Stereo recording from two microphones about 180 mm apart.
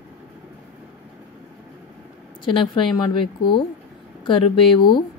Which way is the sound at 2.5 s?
25° left (ahead or behind).